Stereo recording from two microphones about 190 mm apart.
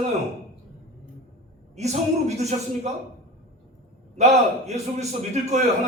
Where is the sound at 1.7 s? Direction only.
35° right (ahead or behind).